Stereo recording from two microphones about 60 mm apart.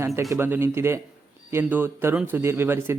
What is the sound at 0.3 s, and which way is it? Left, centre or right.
Speech, right.